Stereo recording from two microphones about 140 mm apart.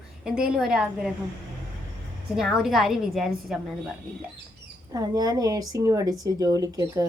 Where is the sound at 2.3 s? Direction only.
5° right (ahead or behind).